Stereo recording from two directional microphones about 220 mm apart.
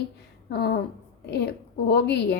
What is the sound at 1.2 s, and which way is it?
A woman's voice, 50° left (ahead or behind).